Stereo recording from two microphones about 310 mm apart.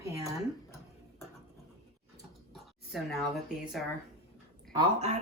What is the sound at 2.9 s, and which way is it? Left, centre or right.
Speech, centre.